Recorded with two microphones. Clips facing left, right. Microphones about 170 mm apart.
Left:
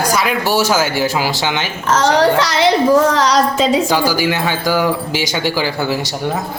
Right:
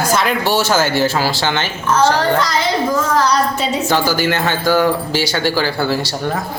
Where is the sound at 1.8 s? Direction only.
90° left.